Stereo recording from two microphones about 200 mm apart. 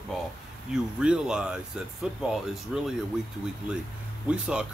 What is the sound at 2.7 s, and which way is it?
Speech, 5° right (ahead or behind).